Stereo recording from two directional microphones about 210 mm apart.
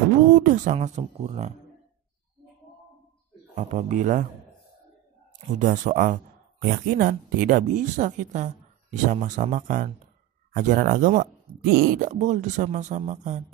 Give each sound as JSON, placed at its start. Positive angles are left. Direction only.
{"t": 0.3, "sound": "speech", "side_deg": -40}
{"t": 3.5, "sound": "speech", "side_deg": -35}
{"t": 5.6, "sound": "speech", "side_deg": -40}